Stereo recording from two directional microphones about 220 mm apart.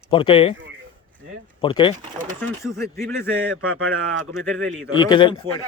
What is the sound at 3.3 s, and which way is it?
Speech, 70° right (ahead or behind).